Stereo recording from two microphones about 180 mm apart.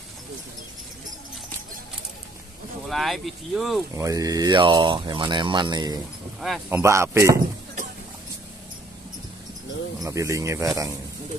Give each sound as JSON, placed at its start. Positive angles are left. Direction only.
{"t": 2.9, "sound": "speech", "side_deg": 0}
{"t": 3.9, "sound": "speech", "side_deg": -20}
{"t": 9.9, "sound": "speech", "side_deg": -20}